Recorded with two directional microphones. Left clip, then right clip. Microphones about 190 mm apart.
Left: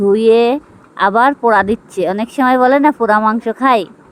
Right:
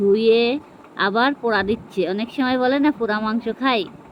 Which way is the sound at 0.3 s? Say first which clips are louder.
Left 6 dB; 45° left (ahead or behind).